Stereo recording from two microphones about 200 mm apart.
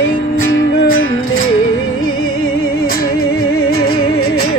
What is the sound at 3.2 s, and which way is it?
Music, 90° left.